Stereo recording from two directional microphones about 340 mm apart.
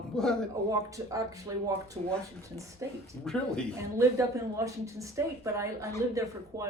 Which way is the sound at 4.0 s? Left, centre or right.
Centre.